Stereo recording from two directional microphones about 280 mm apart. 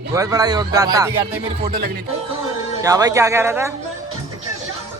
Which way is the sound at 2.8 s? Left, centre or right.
Centre.